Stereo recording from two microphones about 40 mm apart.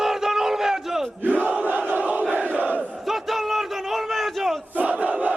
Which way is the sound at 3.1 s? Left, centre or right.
Centre.